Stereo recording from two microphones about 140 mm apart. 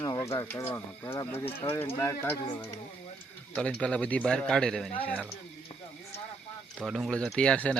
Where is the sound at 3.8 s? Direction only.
10° left (ahead or behind).